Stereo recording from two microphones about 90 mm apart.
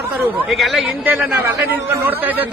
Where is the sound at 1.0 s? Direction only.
20° right (ahead or behind).